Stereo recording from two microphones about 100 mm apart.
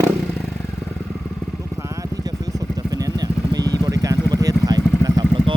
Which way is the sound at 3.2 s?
40° right (ahead or behind).